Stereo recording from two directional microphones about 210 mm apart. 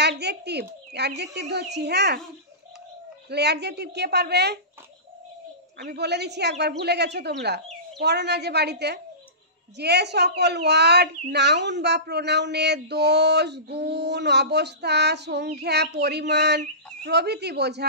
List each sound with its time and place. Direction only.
0.0 s bird: 55° right (ahead or behind)
0.9 s a woman's voice: 50° right (ahead or behind)
3.3 s a woman's voice: 50° right (ahead or behind)
5.8 s a woman's voice: 50° right (ahead or behind)